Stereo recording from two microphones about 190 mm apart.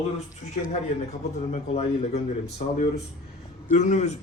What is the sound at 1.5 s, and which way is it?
Speech, 35° left (ahead or behind).